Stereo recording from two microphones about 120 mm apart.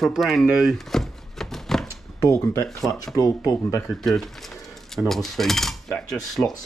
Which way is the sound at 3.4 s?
25° left (ahead or behind).